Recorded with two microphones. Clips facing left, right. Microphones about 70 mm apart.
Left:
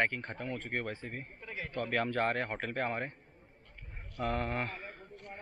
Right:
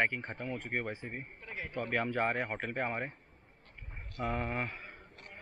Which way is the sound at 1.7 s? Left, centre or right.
Centre.